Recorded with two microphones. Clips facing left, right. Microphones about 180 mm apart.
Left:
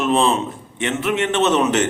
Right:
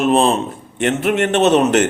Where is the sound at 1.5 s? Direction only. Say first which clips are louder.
Right 5 dB; 60° right (ahead or behind).